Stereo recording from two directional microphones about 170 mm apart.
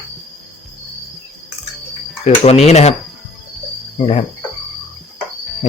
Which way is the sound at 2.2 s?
40° left (ahead or behind).